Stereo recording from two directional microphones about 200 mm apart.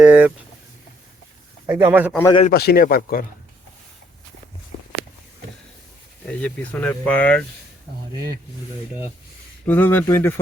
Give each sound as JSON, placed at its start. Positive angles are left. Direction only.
{"t": 0.0, "sound": "speech", "side_deg": -5}
{"t": 1.6, "sound": "speech", "side_deg": -10}
{"t": 2.5, "sound": "speech", "side_deg": 50}
{"t": 6.2, "sound": "speech", "side_deg": 5}
{"t": 8.1, "sound": "speech", "side_deg": -20}
{"t": 9.6, "sound": "speech", "side_deg": 10}